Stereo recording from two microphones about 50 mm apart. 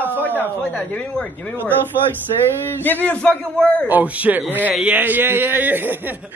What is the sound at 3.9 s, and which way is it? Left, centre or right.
A man's voice, right.